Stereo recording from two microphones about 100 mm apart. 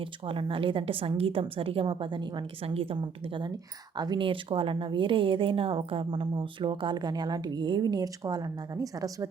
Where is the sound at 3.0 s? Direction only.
50° right (ahead or behind).